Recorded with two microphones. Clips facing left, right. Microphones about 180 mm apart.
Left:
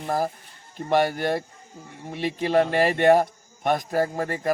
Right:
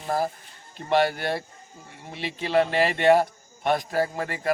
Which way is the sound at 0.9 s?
45° left (ahead or behind).